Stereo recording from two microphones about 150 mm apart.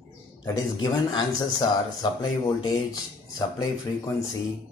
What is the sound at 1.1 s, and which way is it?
Speech, 25° left (ahead or behind).